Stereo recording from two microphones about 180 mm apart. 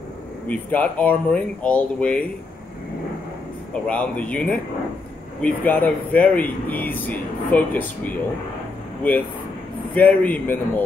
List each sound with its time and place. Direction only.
0.5 s speech: 10° left (ahead or behind)
3.7 s speech: 5° left (ahead or behind)